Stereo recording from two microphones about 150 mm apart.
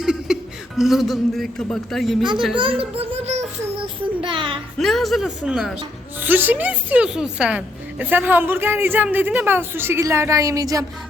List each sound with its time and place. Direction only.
0.0 s music: centre (ahead or behind)
0.8 s speech: centre (ahead or behind)
2.9 s a sound: 45° right (ahead or behind)
4.8 s a woman's voice: centre (ahead or behind); by 10.8 s 20° right (ahead or behind)